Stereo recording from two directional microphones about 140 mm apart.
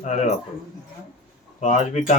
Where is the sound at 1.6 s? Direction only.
60° left (ahead or behind).